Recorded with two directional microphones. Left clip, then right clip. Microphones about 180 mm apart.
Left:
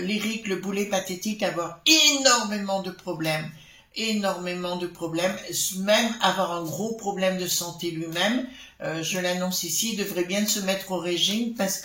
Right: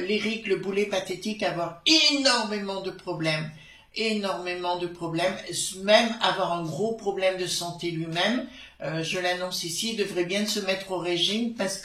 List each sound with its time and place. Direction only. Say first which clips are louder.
0.1 s speech: right 4 dB; 45° left (ahead or behind)